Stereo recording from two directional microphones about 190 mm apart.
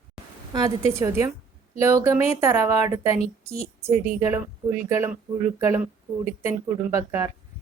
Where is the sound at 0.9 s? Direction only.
15° right (ahead or behind).